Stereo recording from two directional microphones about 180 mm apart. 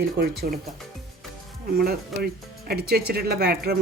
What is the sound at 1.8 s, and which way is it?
Speech, 60° right (ahead or behind).